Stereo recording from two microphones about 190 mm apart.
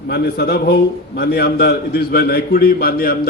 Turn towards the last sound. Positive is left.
turn(degrees=50)  # may be behind; listen again after turning